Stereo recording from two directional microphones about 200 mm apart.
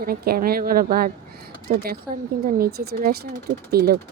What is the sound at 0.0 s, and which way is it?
Speech, 45° right (ahead or behind).